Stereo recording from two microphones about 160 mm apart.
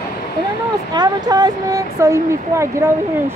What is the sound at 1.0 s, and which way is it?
Speech, 25° right (ahead or behind).